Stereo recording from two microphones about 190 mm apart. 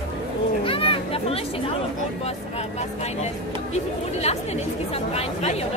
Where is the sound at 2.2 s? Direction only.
35° left (ahead or behind).